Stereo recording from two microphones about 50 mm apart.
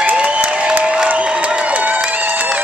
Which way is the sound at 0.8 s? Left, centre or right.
Centre.